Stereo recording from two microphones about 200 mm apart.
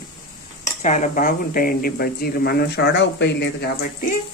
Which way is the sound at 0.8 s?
35° left (ahead or behind).